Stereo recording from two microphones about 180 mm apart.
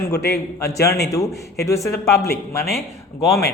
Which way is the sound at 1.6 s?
15° left (ahead or behind).